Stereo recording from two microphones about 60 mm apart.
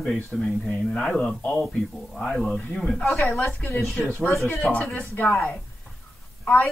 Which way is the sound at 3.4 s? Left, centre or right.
Left.